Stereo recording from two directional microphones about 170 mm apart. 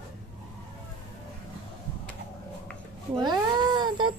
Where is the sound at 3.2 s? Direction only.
25° right (ahead or behind).